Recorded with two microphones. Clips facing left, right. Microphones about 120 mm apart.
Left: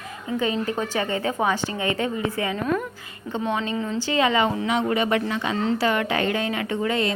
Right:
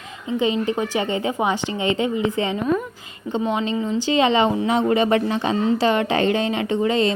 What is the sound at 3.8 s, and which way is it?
A woman's voice, 15° right (ahead or behind).